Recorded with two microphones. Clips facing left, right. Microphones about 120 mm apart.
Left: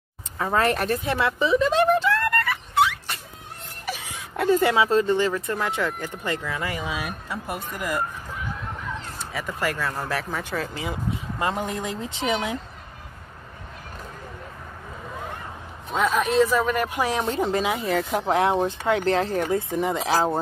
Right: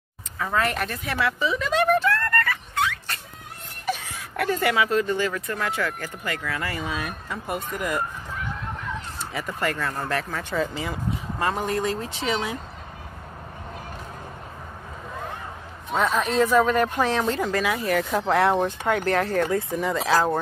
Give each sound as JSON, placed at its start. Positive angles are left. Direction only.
{"t": 0.4, "sound": "speech", "side_deg": 30}
{"t": 2.0, "sound": "a sound", "side_deg": 15}
{"t": 4.4, "sound": "speech", "side_deg": 20}
{"t": 9.2, "sound": "speech", "side_deg": 0}
{"t": 11.3, "sound": "speech", "side_deg": 20}
{"t": 16.3, "sound": "speech", "side_deg": 0}